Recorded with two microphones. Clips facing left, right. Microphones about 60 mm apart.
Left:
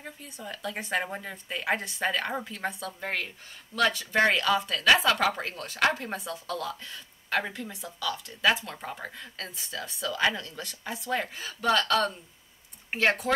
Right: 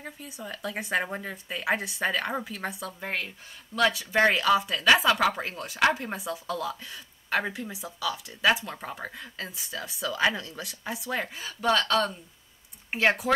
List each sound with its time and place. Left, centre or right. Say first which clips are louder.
0.0 s speech: right 2 dB; centre
11.3 s speech: right 2 dB; centre
11.9 s speech: even; centre
12.9 s speech: right 1 dB; centre